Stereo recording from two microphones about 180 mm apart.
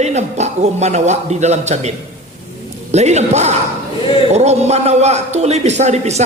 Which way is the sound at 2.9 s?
40° right (ahead or behind).